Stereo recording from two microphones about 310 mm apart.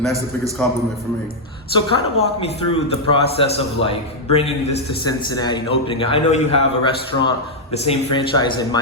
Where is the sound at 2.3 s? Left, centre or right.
Centre.